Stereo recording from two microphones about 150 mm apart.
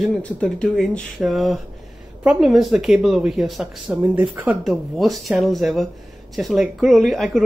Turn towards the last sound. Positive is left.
turn(degrees=0)  # may be behind; listen again after turning